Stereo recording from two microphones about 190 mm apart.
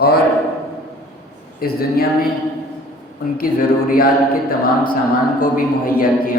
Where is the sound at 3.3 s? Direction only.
50° left (ahead or behind).